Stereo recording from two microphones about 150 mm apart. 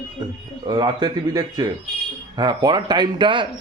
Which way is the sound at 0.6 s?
30° right (ahead or behind).